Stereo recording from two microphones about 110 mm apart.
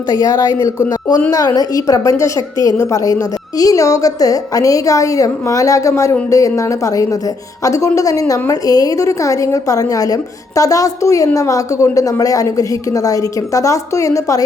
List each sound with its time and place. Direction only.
0.1 s a woman's voice: 35° left (ahead or behind)